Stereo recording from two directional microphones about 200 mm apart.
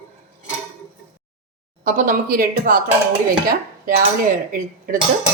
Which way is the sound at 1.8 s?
45° right (ahead or behind).